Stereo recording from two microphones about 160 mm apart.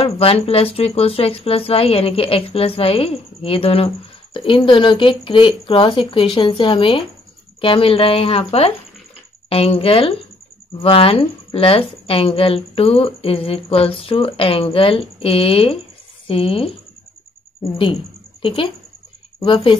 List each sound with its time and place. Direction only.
0.0 s speech: 35° left (ahead or behind)
18.4 s speech: 35° left (ahead or behind)